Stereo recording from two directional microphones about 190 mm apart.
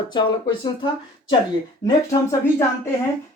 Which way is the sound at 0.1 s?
25° left (ahead or behind).